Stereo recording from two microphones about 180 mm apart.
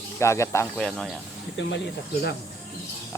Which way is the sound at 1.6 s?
80° left.